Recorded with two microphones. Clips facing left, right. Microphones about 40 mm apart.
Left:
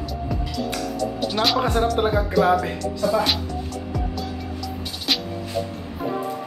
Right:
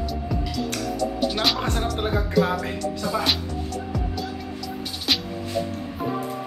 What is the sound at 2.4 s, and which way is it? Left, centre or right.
Speech, centre.